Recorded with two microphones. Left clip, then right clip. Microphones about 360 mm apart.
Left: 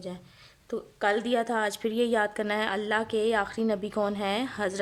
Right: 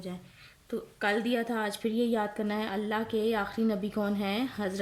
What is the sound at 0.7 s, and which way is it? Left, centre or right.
A woman's voice, centre.